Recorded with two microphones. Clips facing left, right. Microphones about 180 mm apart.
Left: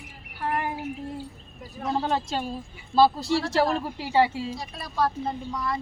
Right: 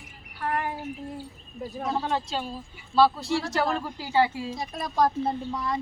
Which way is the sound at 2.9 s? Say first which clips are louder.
Left 1 dB; 35° left (ahead or behind).